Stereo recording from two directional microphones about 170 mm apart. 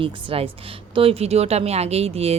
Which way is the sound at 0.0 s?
30° right (ahead or behind).